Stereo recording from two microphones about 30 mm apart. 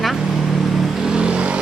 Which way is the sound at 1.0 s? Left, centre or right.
Right.